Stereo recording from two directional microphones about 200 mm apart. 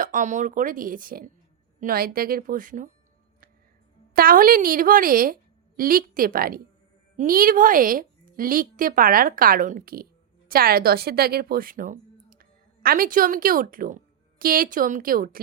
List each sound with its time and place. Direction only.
0.0 s a woman's voice: 40° right (ahead or behind)
4.1 s a woman's voice: 45° right (ahead or behind)